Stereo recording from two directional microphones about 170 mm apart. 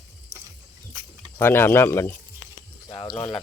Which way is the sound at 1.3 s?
15° left (ahead or behind).